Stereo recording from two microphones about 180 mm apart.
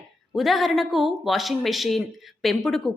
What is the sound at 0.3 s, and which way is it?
A woman's voice, centre (ahead or behind).